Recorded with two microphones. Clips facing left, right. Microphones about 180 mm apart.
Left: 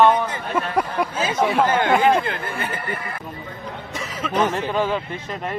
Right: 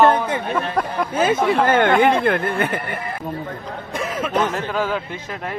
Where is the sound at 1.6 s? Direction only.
55° right (ahead or behind).